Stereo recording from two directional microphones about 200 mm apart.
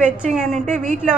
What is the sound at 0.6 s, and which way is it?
Speech, 40° right (ahead or behind).